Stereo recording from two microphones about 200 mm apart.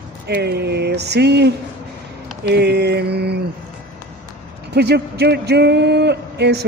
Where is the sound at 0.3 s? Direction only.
55° right (ahead or behind).